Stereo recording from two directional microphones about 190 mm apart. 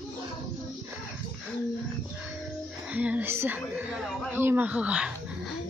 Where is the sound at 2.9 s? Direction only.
5° right (ahead or behind).